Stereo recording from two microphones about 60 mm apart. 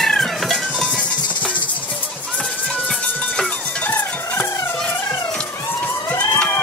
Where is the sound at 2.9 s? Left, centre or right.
Centre.